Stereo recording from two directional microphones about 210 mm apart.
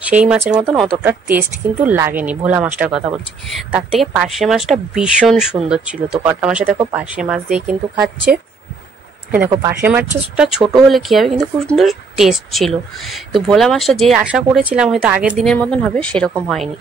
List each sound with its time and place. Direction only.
0.1 s speech: 5° right (ahead or behind)